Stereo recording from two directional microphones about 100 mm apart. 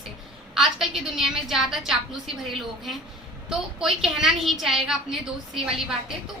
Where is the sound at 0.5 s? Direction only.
5° right (ahead or behind).